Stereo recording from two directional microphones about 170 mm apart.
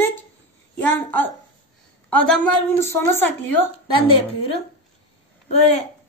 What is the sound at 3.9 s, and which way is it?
Speech, 30° left (ahead or behind).